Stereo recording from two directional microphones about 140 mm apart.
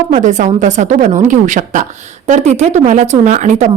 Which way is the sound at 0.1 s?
60° right (ahead or behind).